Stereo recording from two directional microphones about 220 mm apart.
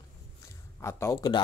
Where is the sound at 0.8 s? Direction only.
15° left (ahead or behind).